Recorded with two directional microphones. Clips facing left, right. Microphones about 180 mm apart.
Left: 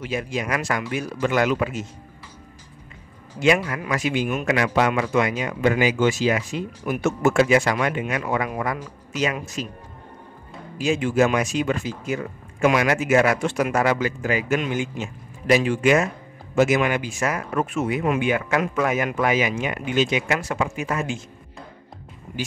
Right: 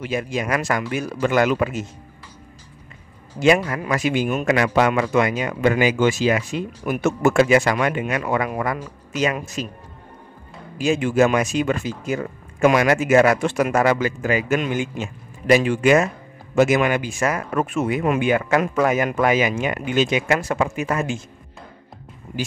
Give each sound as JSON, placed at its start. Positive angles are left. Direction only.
{"t": 0.0, "sound": "speech", "side_deg": -50}
{"t": 3.3, "sound": "a man's voice", "side_deg": -40}
{"t": 10.8, "sound": "speech", "side_deg": -50}